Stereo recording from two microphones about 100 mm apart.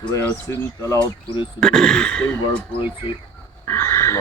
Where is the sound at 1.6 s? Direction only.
5° left (ahead or behind).